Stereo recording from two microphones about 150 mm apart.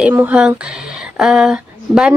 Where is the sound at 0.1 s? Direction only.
10° right (ahead or behind).